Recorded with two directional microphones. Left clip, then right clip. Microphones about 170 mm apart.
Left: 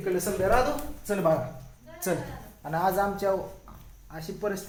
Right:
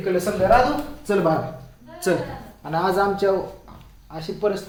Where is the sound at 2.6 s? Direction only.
20° left (ahead or behind).